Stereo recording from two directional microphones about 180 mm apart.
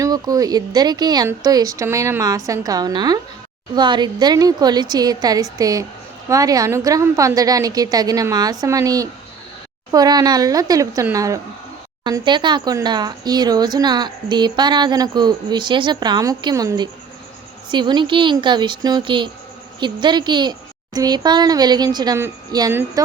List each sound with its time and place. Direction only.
0.0 s speech: 20° right (ahead or behind)